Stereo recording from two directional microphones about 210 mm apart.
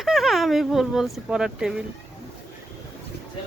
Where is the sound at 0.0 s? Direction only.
Centre (ahead or behind).